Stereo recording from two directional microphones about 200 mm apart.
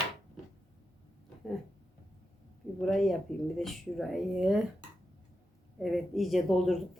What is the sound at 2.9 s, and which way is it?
A woman's voice, centre (ahead or behind).